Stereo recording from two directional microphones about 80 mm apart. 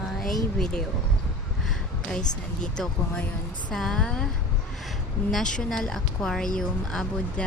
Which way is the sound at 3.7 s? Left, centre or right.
Centre.